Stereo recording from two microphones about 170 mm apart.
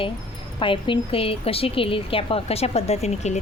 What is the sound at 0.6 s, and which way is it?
A woman's voice, 30° left (ahead or behind).